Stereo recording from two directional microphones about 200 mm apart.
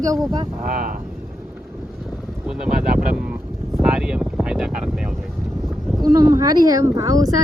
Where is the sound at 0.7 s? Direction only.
45° right (ahead or behind).